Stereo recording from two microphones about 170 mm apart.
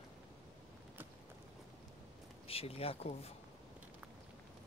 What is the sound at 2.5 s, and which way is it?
Speech, 35° left (ahead or behind).